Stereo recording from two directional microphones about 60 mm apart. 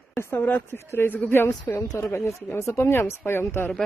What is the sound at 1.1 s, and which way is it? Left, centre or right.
Speech, left.